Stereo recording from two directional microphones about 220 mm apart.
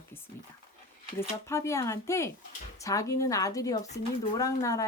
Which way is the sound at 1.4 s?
15° left (ahead or behind).